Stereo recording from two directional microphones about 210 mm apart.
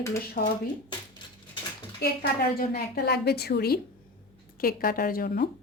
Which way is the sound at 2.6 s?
45° left (ahead or behind).